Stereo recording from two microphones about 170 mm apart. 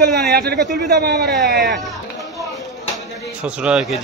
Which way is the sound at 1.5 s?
70° right (ahead or behind).